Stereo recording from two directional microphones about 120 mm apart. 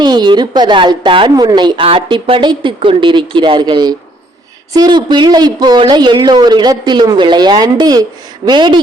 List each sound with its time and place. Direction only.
0.0 s a woman's voice: 35° right (ahead or behind)